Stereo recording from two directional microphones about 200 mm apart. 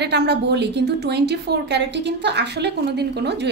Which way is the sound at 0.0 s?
55° right (ahead or behind).